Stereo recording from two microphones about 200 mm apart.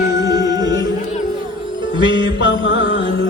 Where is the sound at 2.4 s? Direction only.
65° left (ahead or behind).